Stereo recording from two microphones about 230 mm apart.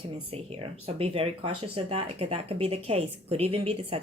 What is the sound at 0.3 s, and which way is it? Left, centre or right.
Speech, right.